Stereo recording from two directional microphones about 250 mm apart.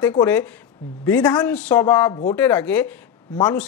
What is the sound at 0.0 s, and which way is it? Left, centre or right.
Speech, centre.